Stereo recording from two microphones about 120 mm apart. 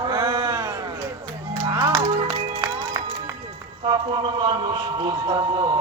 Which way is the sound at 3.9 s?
40° right (ahead or behind).